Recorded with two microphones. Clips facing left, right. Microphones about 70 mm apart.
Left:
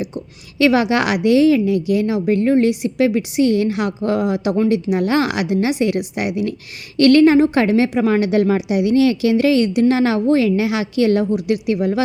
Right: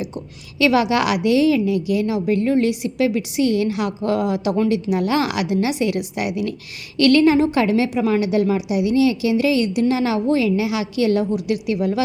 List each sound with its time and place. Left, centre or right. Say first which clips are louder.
0.6 s a woman's voice: left 2 dB; left